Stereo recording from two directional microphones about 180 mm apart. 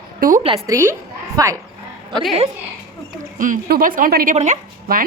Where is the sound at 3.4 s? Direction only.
45° right (ahead or behind).